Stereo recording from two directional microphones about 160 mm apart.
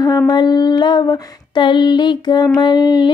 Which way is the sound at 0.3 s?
25° left (ahead or behind).